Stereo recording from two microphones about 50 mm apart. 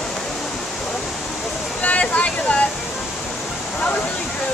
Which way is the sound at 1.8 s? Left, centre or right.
Left.